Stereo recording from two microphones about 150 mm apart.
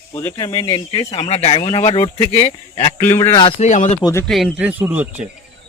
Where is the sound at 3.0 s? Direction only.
15° left (ahead or behind).